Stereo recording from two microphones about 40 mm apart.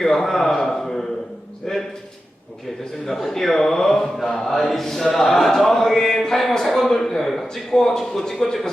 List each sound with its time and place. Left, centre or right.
0.0 s a sound: centre
3.2 s chant: centre
7.5 s a man's voice: centre